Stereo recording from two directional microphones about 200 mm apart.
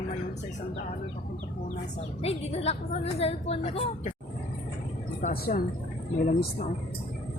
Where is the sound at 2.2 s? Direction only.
30° left (ahead or behind).